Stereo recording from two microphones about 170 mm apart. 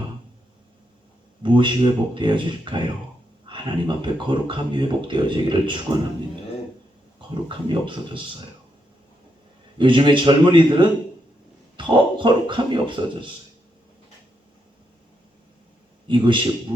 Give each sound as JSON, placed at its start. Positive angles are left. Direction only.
{"t": 1.4, "sound": "speech", "side_deg": -30}
{"t": 7.4, "sound": "speech", "side_deg": -30}
{"t": 9.7, "sound": "speech", "side_deg": -30}
{"t": 16.0, "sound": "speech", "side_deg": -30}